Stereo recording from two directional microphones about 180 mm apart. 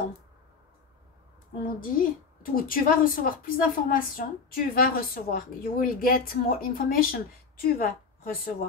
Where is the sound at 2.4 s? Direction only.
50° left (ahead or behind).